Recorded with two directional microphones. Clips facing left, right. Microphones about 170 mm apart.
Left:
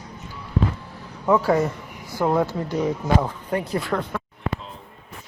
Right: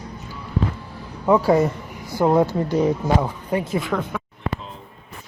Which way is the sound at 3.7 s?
Centre (ahead or behind).